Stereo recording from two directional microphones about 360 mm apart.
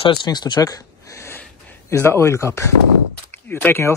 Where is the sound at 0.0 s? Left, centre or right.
Centre.